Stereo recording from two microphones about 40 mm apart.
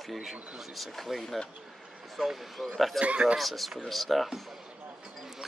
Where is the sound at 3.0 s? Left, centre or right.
Right.